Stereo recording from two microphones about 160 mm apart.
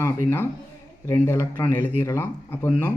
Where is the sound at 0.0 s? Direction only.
15° left (ahead or behind).